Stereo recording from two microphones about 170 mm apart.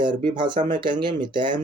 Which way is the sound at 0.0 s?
25° right (ahead or behind).